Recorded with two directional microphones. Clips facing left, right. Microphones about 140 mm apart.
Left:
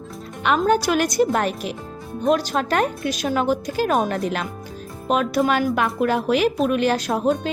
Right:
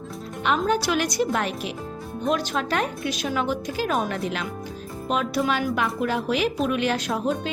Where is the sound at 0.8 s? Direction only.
45° left (ahead or behind).